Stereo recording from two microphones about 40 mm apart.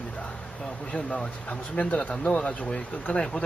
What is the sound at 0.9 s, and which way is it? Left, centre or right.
Speech, left.